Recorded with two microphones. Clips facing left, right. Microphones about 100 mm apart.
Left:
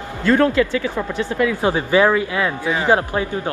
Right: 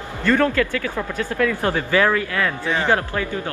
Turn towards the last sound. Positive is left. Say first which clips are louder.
# left 3 dB
turn(degrees=25)  # may be behind; listen again after turning